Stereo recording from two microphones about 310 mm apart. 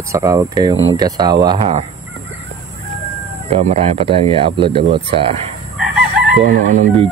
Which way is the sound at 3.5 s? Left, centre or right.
Right.